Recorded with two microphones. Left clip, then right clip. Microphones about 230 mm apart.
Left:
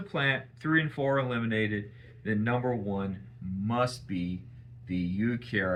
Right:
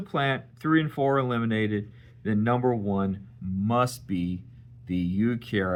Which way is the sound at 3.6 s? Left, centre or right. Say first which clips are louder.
Right 4 dB; right.